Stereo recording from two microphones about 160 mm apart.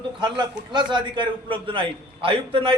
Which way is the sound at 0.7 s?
30° right (ahead or behind).